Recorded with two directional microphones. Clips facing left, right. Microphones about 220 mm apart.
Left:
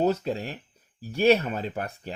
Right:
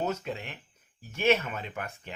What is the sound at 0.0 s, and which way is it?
Speech, 35° left (ahead or behind).